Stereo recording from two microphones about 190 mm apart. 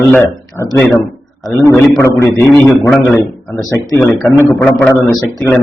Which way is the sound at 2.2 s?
15° left (ahead or behind).